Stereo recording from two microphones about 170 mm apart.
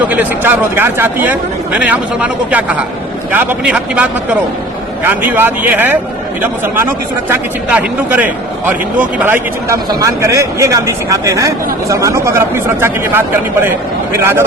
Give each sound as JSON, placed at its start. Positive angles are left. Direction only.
{"t": 0.0, "sound": "speech", "side_deg": -10}
{"t": 7.3, "sound": "speech", "side_deg": -10}